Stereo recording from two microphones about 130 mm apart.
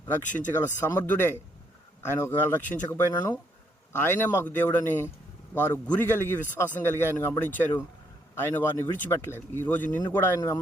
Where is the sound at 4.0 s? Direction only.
15° left (ahead or behind).